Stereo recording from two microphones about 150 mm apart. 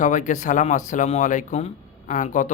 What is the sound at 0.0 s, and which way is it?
Speech, 55° left (ahead or behind).